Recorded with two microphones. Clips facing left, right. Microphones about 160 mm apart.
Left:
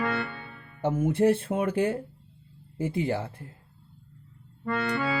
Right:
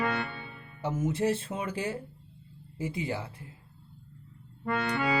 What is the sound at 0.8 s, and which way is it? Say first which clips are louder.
Speech: left 6 dB; 55° left (ahead or behind).